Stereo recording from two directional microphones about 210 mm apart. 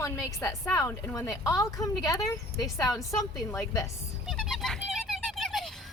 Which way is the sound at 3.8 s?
Centre (ahead or behind).